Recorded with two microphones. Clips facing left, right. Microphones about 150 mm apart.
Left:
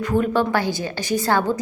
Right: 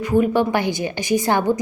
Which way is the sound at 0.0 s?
10° right (ahead or behind).